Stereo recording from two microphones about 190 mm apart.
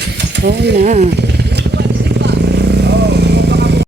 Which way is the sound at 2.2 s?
65° right (ahead or behind).